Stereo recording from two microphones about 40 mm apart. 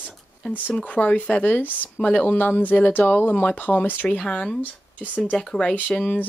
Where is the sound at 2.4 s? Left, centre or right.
Left.